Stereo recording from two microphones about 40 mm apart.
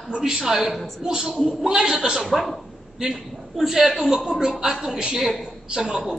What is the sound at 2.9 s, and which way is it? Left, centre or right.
Speech, centre.